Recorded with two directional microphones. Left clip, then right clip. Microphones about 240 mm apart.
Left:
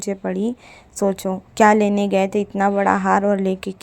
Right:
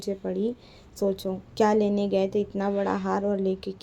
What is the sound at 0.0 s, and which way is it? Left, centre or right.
Speech, left.